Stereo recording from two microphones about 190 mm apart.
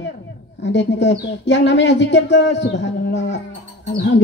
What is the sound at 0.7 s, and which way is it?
A woman's voice, 65° left (ahead or behind).